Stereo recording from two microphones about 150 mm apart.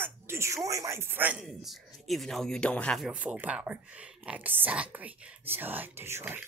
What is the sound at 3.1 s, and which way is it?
Speech, 10° right (ahead or behind).